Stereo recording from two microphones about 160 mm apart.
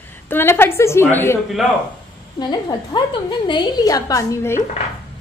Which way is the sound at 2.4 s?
25° left (ahead or behind).